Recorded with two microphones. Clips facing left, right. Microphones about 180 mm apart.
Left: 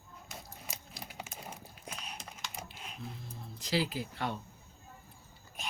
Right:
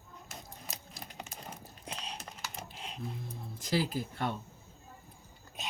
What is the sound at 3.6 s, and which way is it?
Speech, 50° right (ahead or behind).